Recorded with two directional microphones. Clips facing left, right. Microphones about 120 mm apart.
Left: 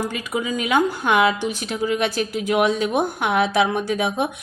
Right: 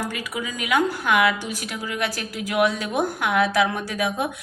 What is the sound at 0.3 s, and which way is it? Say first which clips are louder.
A woman's voice: left 3 dB; 30° left (ahead or behind).